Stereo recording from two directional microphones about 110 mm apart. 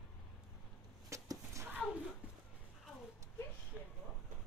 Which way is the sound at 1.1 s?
30° right (ahead or behind).